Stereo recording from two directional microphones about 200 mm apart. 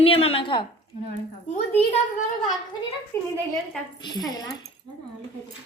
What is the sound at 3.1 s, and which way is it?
Speech, 10° left (ahead or behind).